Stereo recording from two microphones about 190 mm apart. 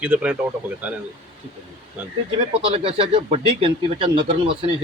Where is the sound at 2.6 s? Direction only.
30° right (ahead or behind).